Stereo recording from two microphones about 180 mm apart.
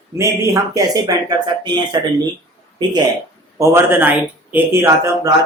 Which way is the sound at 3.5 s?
15° right (ahead or behind).